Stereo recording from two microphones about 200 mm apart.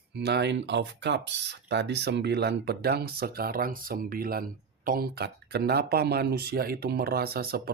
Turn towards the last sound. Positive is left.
turn(degrees=-50)  # may be behind; listen again after turning